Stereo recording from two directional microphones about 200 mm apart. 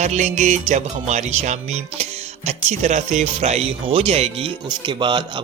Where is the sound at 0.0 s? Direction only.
35° right (ahead or behind).